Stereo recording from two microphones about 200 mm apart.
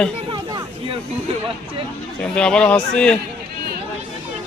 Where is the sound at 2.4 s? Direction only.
5° left (ahead or behind).